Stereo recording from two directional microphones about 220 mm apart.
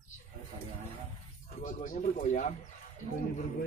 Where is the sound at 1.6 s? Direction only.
35° left (ahead or behind).